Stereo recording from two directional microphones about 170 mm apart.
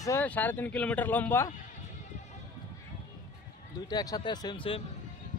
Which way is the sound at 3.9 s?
20° left (ahead or behind).